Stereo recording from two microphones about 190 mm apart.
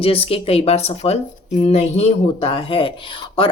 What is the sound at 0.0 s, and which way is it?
Speech, 30° left (ahead or behind).